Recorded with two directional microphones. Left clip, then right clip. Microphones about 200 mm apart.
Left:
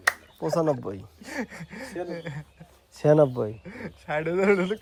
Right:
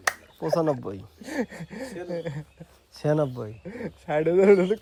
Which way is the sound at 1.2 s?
50° right (ahead or behind).